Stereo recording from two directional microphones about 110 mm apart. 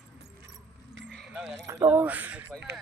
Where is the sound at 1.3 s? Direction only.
10° right (ahead or behind).